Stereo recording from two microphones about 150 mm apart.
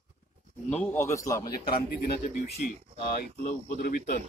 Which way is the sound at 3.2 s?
90° left.